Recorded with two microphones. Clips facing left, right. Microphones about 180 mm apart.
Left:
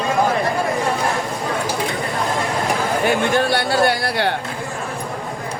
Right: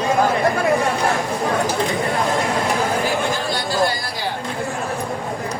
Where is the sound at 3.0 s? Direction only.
65° left (ahead or behind).